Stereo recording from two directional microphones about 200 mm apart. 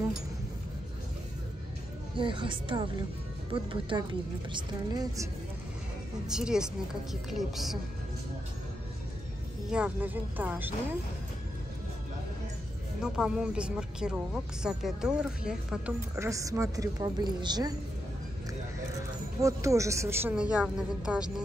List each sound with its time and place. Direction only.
2.1 s a woman's voice: 25° right (ahead or behind)
6.2 s speech: 5° right (ahead or behind)
9.7 s a woman's voice: 5° right (ahead or behind)
13.0 s speech: 5° right (ahead or behind); by 17.7 s 20° right (ahead or behind)
19.4 s a woman's voice: 15° right (ahead or behind)